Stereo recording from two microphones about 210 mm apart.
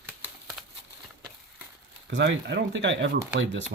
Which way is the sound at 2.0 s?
55° right (ahead or behind).